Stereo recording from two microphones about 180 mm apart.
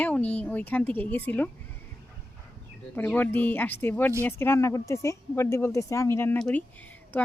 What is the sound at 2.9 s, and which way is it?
Speech, 10° left (ahead or behind).